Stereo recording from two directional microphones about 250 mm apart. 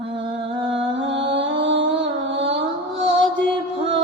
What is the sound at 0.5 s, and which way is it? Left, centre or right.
Music, centre.